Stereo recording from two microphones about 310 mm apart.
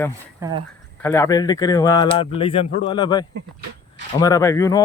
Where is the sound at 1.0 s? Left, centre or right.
Centre.